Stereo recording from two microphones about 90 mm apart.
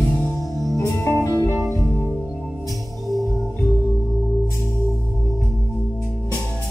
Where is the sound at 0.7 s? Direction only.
30° left (ahead or behind).